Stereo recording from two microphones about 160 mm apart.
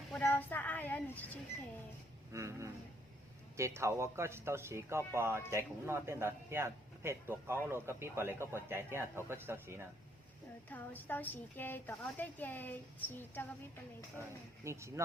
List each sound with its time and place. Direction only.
0.1 s child singing: 10° left (ahead or behind)
2.3 s a man's voice: 20° right (ahead or behind)
10.7 s a woman's voice: 10° left (ahead or behind)
14.2 s a man's voice: 15° right (ahead or behind)